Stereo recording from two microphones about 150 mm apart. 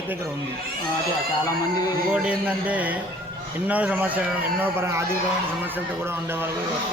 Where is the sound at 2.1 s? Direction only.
10° right (ahead or behind).